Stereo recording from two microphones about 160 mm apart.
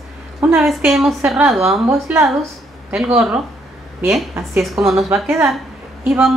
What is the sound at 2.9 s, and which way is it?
A woman's voice, 5° right (ahead or behind).